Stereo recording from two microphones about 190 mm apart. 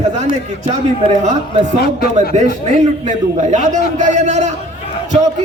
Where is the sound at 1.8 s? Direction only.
55° left (ahead or behind).